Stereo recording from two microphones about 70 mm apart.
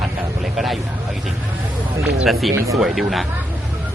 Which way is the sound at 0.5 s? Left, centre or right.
Centre.